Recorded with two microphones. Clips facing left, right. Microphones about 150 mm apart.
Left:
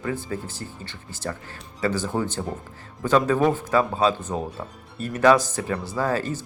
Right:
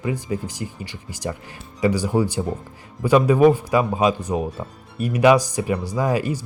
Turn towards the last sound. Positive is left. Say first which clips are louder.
# right 3 dB
turn(degrees=-10)  # may be behind; listen again after turning